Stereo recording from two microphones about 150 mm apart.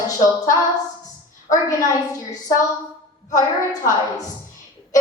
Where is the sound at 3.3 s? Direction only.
20° left (ahead or behind).